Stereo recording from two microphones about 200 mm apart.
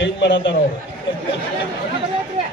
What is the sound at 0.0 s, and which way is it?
Speech, 65° left (ahead or behind).